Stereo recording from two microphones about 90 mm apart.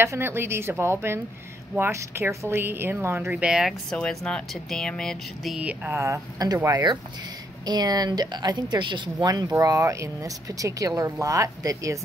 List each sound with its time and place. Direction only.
0.0 s speech: 25° right (ahead or behind)
3.3 s speech: 10° right (ahead or behind)
3.9 s speech: 5° left (ahead or behind)
5.6 s speech: 15° right (ahead or behind)
5.9 s speech: 30° right (ahead or behind)
6.7 s speech: 55° right (ahead or behind)
9.3 s speech: 40° right (ahead or behind)